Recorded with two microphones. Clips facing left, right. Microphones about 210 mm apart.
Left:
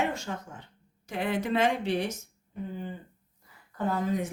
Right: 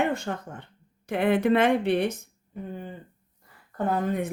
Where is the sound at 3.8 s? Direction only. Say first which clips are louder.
Right 3 dB; 55° right (ahead or behind).